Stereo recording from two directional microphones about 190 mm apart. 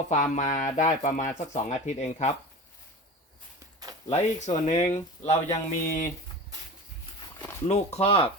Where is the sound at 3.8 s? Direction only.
20° right (ahead or behind).